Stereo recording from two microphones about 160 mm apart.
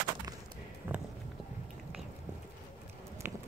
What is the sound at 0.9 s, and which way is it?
Walk, 10° right (ahead or behind).